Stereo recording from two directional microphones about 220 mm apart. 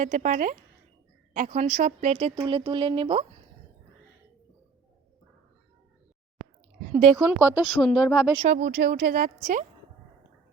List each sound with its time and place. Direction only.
0.0 s speech: 35° right (ahead or behind)
2.3 s speech: 20° right (ahead or behind)
7.3 s speech: 10° right (ahead or behind)
8.4 s speech: 45° right (ahead or behind)